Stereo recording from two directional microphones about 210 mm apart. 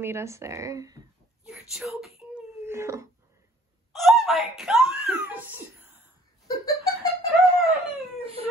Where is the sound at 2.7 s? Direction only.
15° right (ahead or behind).